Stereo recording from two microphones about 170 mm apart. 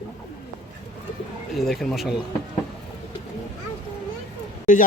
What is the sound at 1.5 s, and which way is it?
Speech, centre (ahead or behind).